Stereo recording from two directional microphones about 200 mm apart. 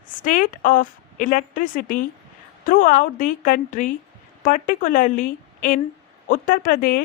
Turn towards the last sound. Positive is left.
turn(degrees=45)  # may be behind; listen again after turning